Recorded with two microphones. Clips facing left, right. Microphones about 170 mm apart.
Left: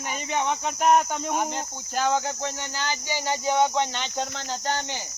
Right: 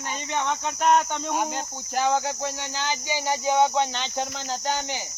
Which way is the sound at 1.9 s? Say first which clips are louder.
Right 1 dB; 15° right (ahead or behind).